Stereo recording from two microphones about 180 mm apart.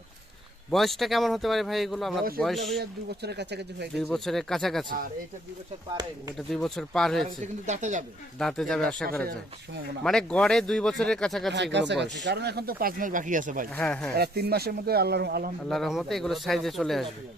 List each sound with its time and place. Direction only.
0.7 s a man's voice: centre (ahead or behind)
3.2 s speech: 65° right (ahead or behind)
3.9 s a man's voice: centre (ahead or behind)
6.3 s a man's voice: centre (ahead or behind)
7.4 s speech: 40° right (ahead or behind)
8.4 s a man's voice: 5° left (ahead or behind)
11.5 s speech: 75° right (ahead or behind); by 13.7 s 45° right (ahead or behind)
13.7 s speech: 5° left (ahead or behind)
14.2 s speech: 60° right (ahead or behind)
15.7 s a man's voice: centre (ahead or behind)